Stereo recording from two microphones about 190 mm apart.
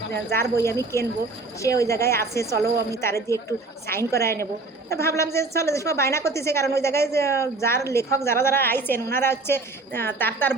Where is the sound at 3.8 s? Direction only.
15° left (ahead or behind).